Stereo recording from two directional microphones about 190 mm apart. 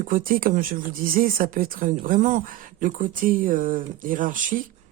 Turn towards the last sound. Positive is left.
turn(degrees=-45)  # may be behind; listen again after turning